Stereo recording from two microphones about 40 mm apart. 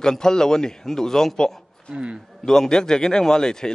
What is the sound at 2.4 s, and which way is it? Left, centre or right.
A man's voice, centre.